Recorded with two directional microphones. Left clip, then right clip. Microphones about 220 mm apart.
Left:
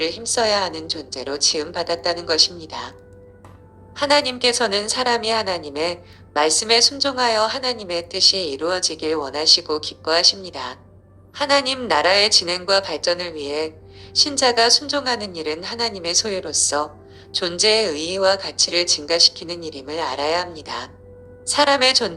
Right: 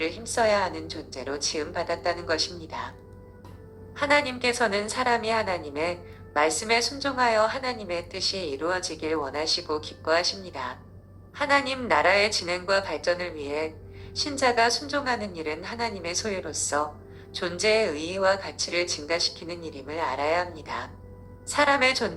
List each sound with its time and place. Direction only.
0.0 s a woman's voice: 50° left (ahead or behind)
3.9 s a woman's voice: 50° left (ahead or behind)